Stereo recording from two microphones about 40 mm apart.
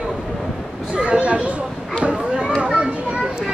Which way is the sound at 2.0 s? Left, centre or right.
Right.